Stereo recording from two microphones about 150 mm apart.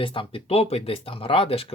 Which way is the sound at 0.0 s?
35° left (ahead or behind).